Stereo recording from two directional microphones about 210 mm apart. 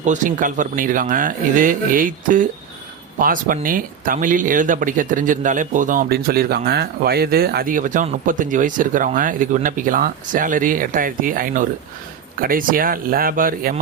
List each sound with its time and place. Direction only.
0.0 s speech: 35° right (ahead or behind)